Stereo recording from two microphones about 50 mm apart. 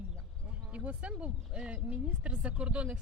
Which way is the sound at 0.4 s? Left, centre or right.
Right.